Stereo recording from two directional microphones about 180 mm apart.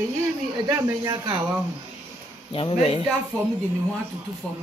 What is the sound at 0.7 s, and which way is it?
Speech, 20° right (ahead or behind).